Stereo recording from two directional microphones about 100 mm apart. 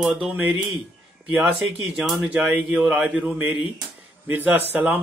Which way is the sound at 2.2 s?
10° right (ahead or behind).